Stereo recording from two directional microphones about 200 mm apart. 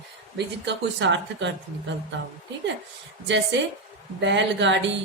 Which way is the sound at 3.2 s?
65° right (ahead or behind).